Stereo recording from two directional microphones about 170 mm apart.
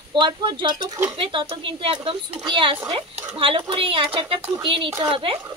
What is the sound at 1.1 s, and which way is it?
A woman's voice, 30° right (ahead or behind).